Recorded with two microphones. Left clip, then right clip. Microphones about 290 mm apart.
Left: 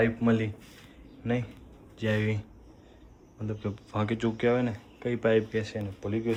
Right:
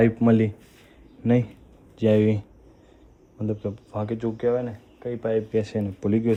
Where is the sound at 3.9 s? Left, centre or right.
Centre.